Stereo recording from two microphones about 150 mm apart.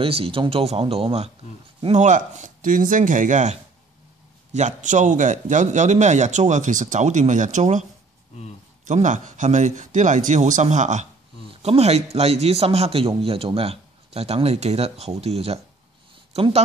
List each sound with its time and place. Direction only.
0.0 s speech: 40° right (ahead or behind); by 3.5 s 55° right (ahead or behind)
4.6 s a man's voice: 55° right (ahead or behind)
8.8 s a man's voice: 55° right (ahead or behind)